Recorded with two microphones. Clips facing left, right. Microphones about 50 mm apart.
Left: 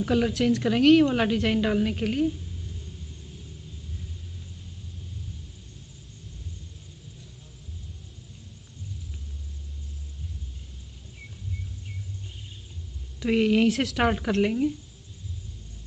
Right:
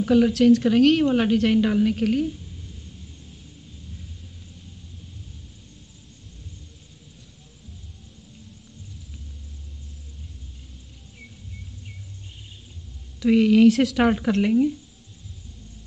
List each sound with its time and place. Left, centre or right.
0.0 s a woman's voice: centre
0.3 s a woman's voice: centre
1.0 s speech: centre
1.3 s a woman's voice: centre
13.2 s speech: centre